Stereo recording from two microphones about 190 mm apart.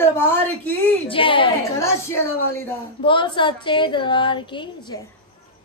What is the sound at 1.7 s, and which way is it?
Speech, 15° left (ahead or behind).